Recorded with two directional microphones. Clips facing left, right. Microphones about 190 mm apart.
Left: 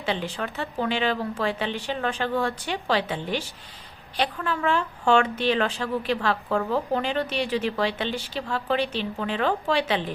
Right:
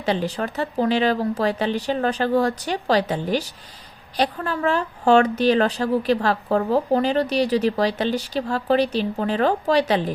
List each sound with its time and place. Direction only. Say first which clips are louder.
0.0 s speech: right 5 dB; 40° right (ahead or behind)